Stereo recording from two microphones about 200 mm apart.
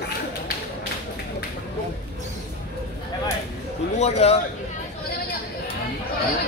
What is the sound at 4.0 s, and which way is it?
Speech, 30° left (ahead or behind).